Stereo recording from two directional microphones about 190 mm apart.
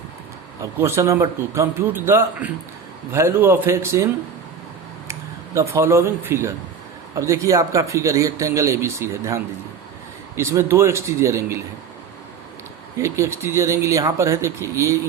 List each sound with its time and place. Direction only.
0.6 s speech: 15° right (ahead or behind)
5.5 s speech: 15° right (ahead or behind)
13.0 s speech: 15° right (ahead or behind)